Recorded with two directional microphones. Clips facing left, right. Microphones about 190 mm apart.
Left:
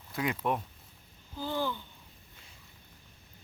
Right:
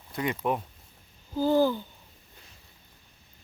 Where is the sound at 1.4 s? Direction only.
40° right (ahead or behind).